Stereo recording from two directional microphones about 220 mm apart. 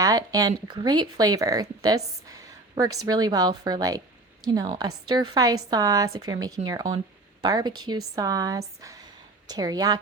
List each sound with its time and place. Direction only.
0.0 s a woman's voice: 15° right (ahead or behind)